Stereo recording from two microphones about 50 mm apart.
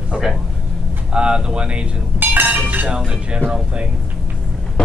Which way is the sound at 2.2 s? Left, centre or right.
Right.